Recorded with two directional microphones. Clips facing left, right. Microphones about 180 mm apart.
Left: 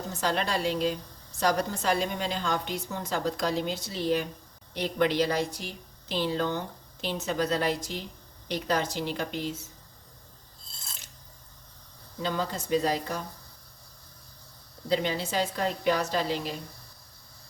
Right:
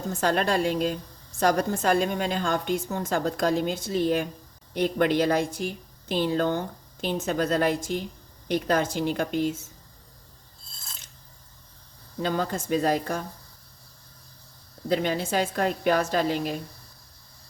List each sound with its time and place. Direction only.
0.1 s a woman's voice: 50° right (ahead or behind)
12.2 s a woman's voice: 50° right (ahead or behind)
14.8 s a woman's voice: 50° right (ahead or behind)